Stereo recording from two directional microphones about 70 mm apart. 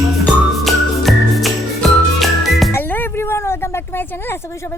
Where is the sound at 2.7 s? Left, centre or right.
Left.